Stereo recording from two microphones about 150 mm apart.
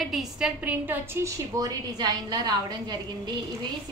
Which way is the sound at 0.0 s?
Centre (ahead or behind).